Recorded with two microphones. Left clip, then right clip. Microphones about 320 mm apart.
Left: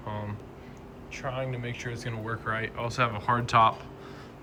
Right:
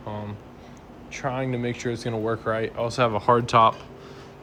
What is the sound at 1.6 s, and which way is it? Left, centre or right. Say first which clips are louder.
Speech: right 8 dB; centre.